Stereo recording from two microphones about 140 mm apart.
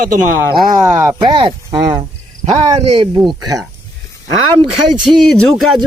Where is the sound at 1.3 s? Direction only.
30° right (ahead or behind).